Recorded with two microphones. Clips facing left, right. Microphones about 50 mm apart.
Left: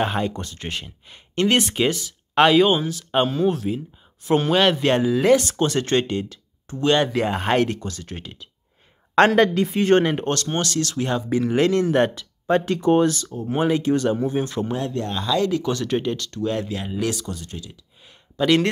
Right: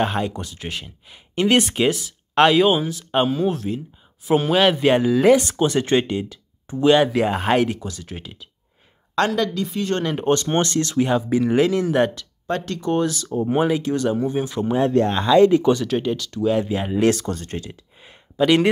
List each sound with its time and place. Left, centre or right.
0.0 s speech: centre
9.1 s speech: left
10.2 s speech: centre
11.0 s speech: centre
12.2 s speech: centre
13.0 s speech: centre
14.9 s speech: right
15.8 s speech: centre
16.6 s speech: right
17.1 s speech: right
18.4 s speech: centre